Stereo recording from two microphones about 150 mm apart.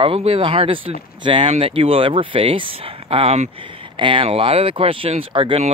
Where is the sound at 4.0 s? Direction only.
35° right (ahead or behind).